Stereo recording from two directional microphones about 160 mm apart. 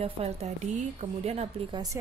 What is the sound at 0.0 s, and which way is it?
A woman's voice, 40° right (ahead or behind).